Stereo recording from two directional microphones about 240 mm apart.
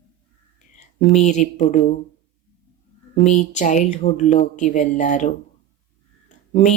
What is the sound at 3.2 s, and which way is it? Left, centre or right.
Speech, left.